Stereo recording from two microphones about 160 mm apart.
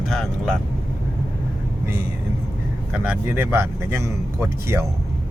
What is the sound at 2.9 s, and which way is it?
A man's voice, 10° right (ahead or behind).